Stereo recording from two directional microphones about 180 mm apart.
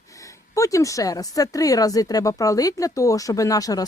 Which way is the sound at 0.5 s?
15° left (ahead or behind).